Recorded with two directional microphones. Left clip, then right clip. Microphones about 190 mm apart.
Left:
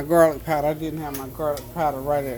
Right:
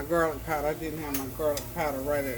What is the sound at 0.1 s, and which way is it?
Speech, 50° left (ahead or behind).